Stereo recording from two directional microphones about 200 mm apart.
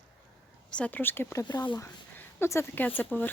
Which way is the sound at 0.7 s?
5° left (ahead or behind).